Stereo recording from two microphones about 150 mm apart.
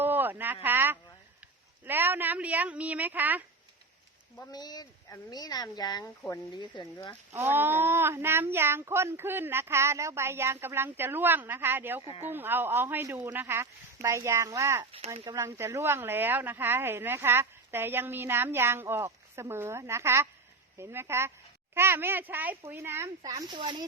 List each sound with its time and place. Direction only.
0.0 s a sound: 15° right (ahead or behind)
1.8 s speech: 15° right (ahead or behind)
4.5 s speech: 25° left (ahead or behind)
7.3 s speech: 15° right (ahead or behind); by 23.8 s 30° right (ahead or behind)